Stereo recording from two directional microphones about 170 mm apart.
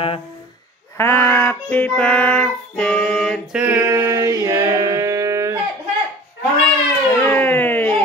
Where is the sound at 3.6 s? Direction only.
10° right (ahead or behind).